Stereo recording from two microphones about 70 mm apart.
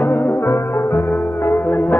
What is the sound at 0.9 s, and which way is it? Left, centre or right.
Music, left.